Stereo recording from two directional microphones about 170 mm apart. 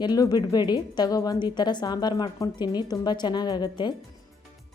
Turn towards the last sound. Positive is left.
turn(degrees=25)  # may be behind; listen again after turning